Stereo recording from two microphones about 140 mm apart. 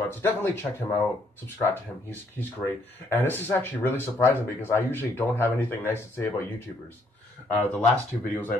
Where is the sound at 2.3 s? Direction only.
15° left (ahead or behind).